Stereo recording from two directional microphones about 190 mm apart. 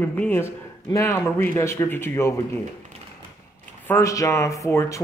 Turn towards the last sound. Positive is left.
turn(degrees=15)  # may be behind; listen again after turning